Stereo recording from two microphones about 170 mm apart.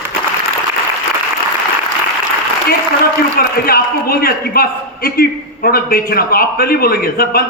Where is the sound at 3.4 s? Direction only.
60° left (ahead or behind).